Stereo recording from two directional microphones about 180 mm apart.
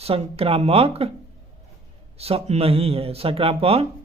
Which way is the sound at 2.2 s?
35° right (ahead or behind).